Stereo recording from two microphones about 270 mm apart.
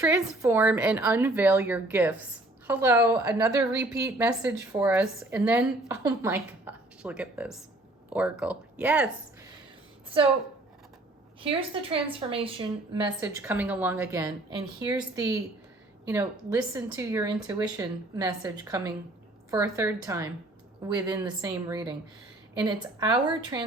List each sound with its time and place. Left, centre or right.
0.0 s speech: centre
11.3 s a woman's voice: centre